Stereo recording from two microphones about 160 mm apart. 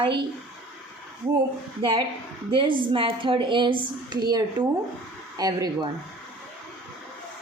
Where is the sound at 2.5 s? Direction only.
30° right (ahead or behind).